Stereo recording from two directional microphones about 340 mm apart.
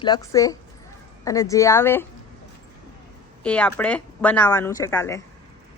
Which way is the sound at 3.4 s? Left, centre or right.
Centre.